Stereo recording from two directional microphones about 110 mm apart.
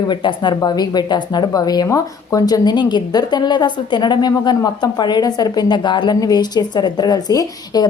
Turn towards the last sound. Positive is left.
turn(degrees=35)  # may be behind; listen again after turning